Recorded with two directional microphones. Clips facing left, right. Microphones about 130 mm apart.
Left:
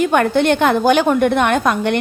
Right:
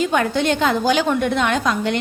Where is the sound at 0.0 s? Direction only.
55° left (ahead or behind).